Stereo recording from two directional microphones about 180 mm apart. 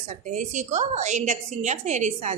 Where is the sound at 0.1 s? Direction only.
45° right (ahead or behind).